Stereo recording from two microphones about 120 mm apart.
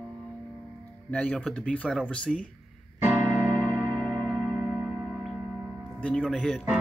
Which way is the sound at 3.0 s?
20° right (ahead or behind).